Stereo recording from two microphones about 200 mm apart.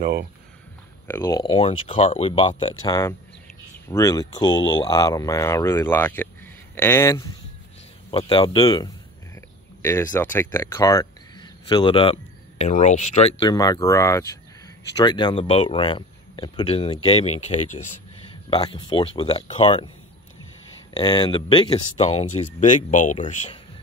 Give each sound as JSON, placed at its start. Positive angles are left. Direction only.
{"t": 0.0, "sound": "speech", "side_deg": -55}
{"t": 1.0, "sound": "speech", "side_deg": 15}
{"t": 2.9, "sound": "speech", "side_deg": 15}
{"t": 8.1, "sound": "speech", "side_deg": 25}
{"t": 11.7, "sound": "speech", "side_deg": 25}
{"t": 13.5, "sound": "speech", "side_deg": 15}
{"t": 20.9, "sound": "speech", "side_deg": 20}